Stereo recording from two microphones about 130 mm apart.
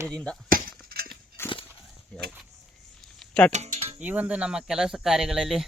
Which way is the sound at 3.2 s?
10° left (ahead or behind).